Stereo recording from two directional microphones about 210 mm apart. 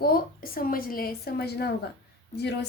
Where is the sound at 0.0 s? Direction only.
45° left (ahead or behind).